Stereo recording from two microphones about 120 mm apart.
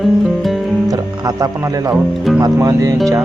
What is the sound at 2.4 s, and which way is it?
Speech, 30° right (ahead or behind).